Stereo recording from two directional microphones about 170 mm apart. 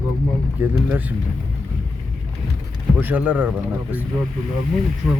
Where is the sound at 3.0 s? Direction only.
10° right (ahead or behind).